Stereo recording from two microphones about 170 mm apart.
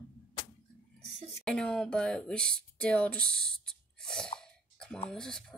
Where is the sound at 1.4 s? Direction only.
5° left (ahead or behind).